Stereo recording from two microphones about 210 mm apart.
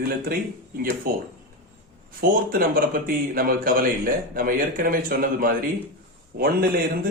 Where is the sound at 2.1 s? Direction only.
45° right (ahead or behind).